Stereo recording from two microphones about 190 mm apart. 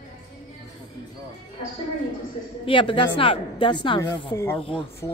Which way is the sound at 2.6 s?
25° left (ahead or behind).